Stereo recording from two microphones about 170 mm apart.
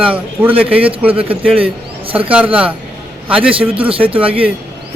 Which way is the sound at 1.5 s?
35° right (ahead or behind).